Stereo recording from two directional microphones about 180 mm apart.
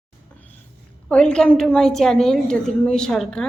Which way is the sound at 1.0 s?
5° left (ahead or behind).